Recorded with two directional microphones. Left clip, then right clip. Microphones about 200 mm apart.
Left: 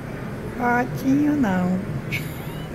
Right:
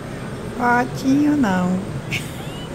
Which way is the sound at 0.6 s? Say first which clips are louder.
Right 4 dB; 5° right (ahead or behind).